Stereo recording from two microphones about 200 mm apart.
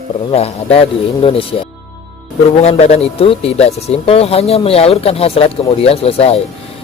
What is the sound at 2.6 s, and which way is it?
Speech, 30° left (ahead or behind).